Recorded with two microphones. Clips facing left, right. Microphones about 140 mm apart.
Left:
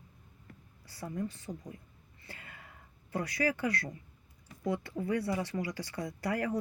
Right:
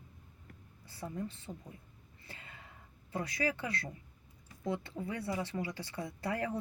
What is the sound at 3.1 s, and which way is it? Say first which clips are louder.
Speech: left 3 dB; 25° right (ahead or behind).